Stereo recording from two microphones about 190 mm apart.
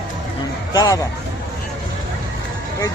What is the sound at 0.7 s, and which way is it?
Speech, 20° left (ahead or behind).